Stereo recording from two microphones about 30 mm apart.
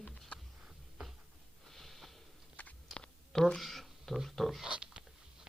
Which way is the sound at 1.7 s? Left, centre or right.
Centre.